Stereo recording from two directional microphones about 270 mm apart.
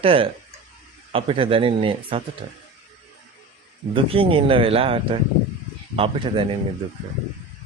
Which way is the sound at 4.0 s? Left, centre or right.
Centre.